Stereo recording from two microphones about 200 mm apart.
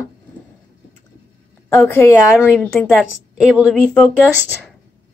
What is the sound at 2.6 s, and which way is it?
A woman's voice, centre (ahead or behind).